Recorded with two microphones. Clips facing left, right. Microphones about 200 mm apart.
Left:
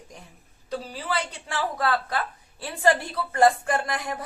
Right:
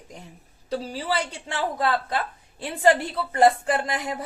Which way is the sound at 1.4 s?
25° right (ahead or behind).